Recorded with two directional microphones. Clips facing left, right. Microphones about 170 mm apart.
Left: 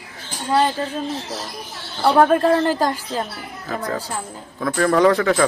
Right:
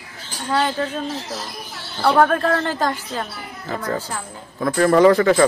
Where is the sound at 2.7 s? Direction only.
10° left (ahead or behind).